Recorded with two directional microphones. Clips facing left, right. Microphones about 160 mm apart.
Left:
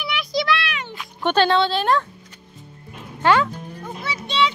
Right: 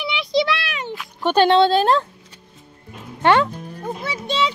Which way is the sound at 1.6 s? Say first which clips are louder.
Right 6 dB; 45° right (ahead or behind).